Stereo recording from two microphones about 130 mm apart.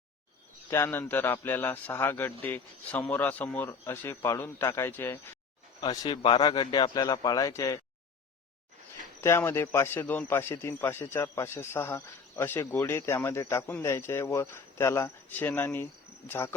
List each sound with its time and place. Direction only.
0.7 s speech: 15° left (ahead or behind)
5.9 s a man's voice: 30° left (ahead or behind)
9.2 s a man's voice: 20° left (ahead or behind)